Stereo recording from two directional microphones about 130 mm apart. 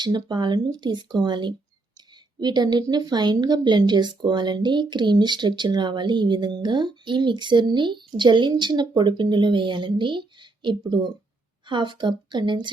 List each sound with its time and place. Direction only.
0.0 s a woman's voice: 35° right (ahead or behind)